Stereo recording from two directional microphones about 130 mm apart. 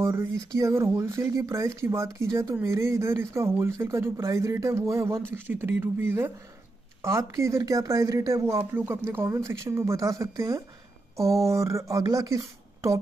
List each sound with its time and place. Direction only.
0.0 s speech: 20° right (ahead or behind)